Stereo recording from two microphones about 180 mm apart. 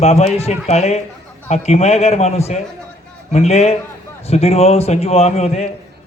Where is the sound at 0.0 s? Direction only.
35° left (ahead or behind).